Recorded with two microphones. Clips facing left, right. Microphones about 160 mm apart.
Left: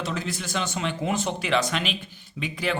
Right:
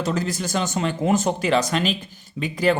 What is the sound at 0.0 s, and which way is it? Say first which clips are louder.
A man's voice: right 6 dB; 40° right (ahead or behind).